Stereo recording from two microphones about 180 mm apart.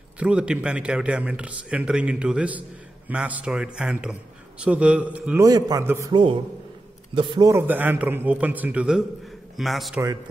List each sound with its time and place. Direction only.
0.2 s speech: 5° right (ahead or behind)
5.4 s a man's voice: 20° right (ahead or behind); by 10.0 s centre (ahead or behind)